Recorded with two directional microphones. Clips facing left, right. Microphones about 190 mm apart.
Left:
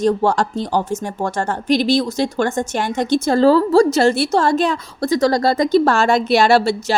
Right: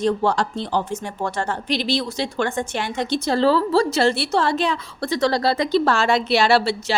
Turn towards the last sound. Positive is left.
turn(degrees=45)  # may be behind; listen again after turning